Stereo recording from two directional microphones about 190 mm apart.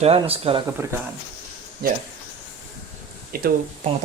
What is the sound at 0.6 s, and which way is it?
Speech, 10° right (ahead or behind).